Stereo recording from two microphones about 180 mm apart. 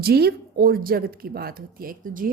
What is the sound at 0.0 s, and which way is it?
A woman's voice, 60° right (ahead or behind).